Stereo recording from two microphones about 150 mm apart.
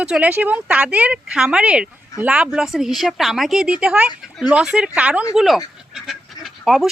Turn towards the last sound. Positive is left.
turn(degrees=0)  # may be behind; listen again after turning